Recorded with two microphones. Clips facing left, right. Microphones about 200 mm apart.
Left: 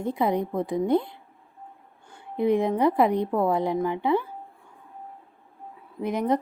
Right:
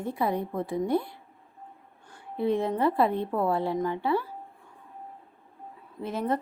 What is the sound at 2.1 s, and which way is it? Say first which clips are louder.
A woman's voice: left 4 dB; 15° left (ahead or behind).